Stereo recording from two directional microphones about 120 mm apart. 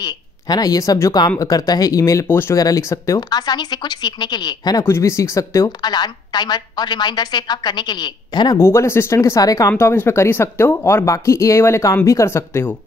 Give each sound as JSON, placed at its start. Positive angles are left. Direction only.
{"t": 0.0, "sound": "a woman's voice", "side_deg": 30}
{"t": 3.2, "sound": "a woman's voice", "side_deg": 35}
{"t": 8.5, "sound": "speech", "side_deg": 20}